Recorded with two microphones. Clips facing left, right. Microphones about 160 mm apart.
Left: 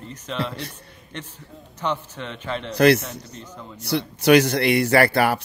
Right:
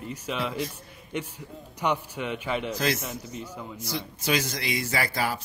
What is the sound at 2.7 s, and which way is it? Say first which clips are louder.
Speech: left 11 dB; 70° left (ahead or behind).